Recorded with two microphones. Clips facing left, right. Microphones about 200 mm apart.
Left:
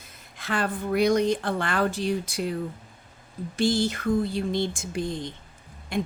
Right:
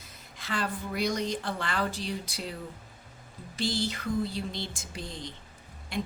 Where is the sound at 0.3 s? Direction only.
55° left (ahead or behind).